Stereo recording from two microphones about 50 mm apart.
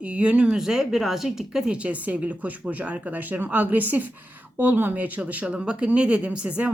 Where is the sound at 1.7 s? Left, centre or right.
Right.